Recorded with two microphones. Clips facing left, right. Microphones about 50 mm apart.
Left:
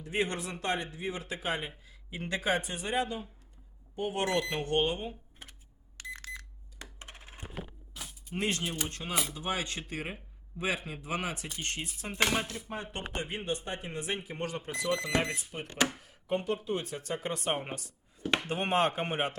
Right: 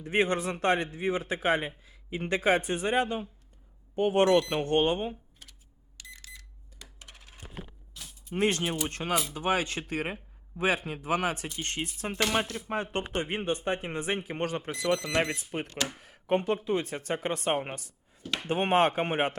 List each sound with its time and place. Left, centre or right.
0.0 s speech: right
5.4 s a sound: left
6.0 s alarm clock: left
6.7 s coin: left
8.4 s speech: right
11.5 s speech: right
15.6 s speech: left
16.0 s speech: right
17.8 s a sound: left
18.4 s speech: right